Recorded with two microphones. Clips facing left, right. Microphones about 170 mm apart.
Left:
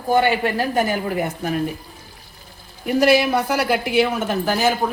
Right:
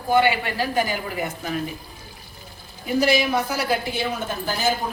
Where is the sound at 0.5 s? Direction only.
50° left (ahead or behind).